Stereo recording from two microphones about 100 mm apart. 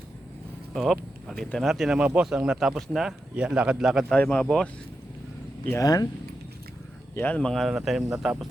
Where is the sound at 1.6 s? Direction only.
Centre (ahead or behind).